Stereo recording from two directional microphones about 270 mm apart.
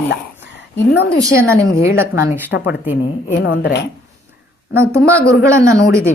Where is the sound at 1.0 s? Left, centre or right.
Centre.